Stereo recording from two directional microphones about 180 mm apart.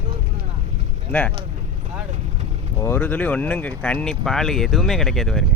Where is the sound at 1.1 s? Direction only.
10° left (ahead or behind).